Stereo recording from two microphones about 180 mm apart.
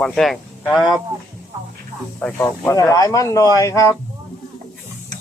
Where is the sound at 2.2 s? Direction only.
10° left (ahead or behind).